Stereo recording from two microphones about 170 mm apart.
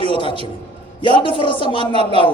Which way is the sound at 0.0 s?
30° left (ahead or behind).